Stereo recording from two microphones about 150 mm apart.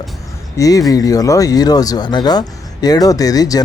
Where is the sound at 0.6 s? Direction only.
25° left (ahead or behind).